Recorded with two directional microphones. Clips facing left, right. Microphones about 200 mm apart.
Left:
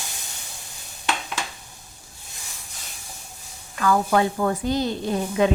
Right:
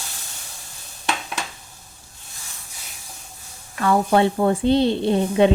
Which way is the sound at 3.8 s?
30° right (ahead or behind).